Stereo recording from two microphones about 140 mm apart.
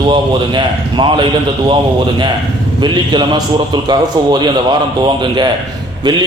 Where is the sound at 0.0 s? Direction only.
35° right (ahead or behind).